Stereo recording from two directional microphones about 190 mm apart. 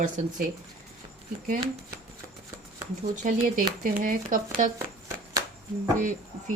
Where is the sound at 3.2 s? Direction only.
45° right (ahead or behind).